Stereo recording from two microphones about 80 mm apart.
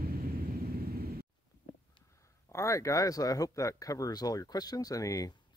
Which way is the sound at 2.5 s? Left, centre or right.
Left.